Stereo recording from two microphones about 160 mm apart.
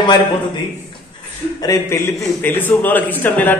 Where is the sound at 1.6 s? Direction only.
20° left (ahead or behind).